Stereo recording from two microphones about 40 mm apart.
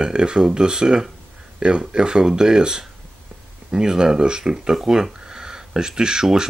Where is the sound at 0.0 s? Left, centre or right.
Right.